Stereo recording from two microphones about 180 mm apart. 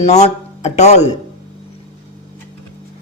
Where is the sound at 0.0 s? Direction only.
40° left (ahead or behind).